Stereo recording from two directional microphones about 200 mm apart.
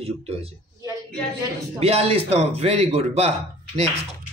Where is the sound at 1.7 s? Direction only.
30° right (ahead or behind).